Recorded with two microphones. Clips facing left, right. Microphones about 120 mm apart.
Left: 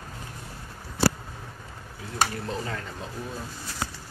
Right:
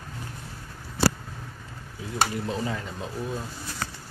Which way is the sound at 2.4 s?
15° right (ahead or behind).